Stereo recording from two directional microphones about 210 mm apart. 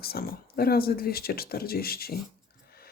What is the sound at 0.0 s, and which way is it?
Speech, 45° left (ahead or behind).